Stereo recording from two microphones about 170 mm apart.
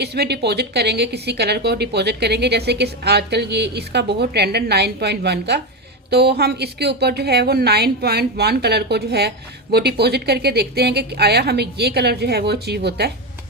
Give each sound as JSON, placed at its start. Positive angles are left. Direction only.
{"t": 0.0, "sound": "speech", "side_deg": -70}